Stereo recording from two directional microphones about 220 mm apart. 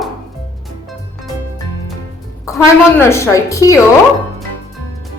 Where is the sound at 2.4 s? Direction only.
10° left (ahead or behind).